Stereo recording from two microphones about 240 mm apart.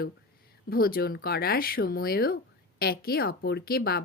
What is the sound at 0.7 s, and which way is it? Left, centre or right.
Speech, left.